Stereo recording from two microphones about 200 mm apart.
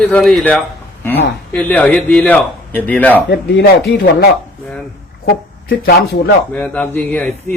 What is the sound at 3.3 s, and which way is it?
Speech, 50° left (ahead or behind).